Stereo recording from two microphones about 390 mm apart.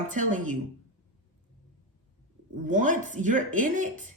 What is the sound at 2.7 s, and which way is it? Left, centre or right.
Speech, centre.